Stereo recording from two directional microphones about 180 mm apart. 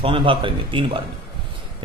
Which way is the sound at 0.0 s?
30° right (ahead or behind).